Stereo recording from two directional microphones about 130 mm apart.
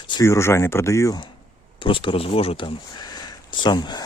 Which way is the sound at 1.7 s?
40° left (ahead or behind).